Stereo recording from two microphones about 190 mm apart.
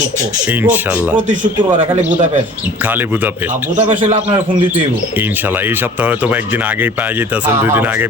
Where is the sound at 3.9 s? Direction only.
40° right (ahead or behind).